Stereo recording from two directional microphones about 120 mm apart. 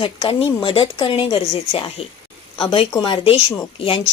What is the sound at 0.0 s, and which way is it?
Speech, 50° left (ahead or behind).